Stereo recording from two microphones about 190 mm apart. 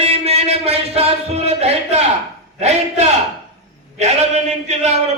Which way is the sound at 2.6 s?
35° right (ahead or behind).